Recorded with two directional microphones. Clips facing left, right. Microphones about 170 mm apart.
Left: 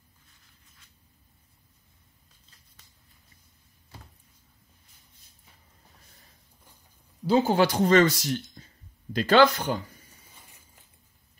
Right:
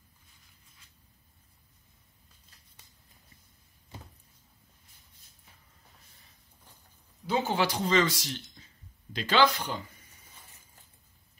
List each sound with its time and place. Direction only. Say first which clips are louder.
7.2 s speech: left 7 dB; 40° left (ahead or behind)